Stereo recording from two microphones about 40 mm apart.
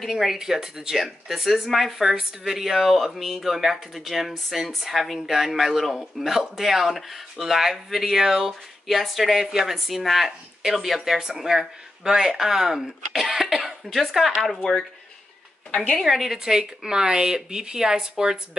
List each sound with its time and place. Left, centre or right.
0.0 s speech: centre
15.7 s a woman's voice: left
16.2 s speech: centre